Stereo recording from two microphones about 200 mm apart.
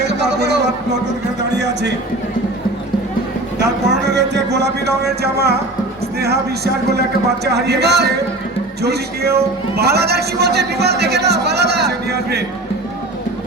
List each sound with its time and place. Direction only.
0.0 s a sound: 60° right (ahead or behind)
1.5 s a man's voice: 60° right (ahead or behind)
3.6 s a man's voice: 60° right (ahead or behind)
7.4 s a man's voice: 55° right (ahead or behind)